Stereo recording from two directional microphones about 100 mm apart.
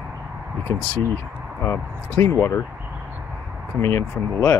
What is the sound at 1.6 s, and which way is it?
Speech, 25° left (ahead or behind).